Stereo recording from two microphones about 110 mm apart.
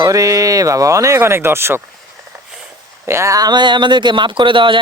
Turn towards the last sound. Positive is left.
turn(degrees=-50)  # may be behind; listen again after turning